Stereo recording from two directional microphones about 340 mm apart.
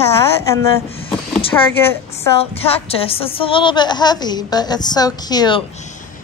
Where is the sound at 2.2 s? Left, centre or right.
Centre.